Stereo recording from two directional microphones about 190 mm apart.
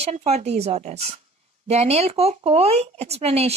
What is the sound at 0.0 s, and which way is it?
Speech, 35° right (ahead or behind).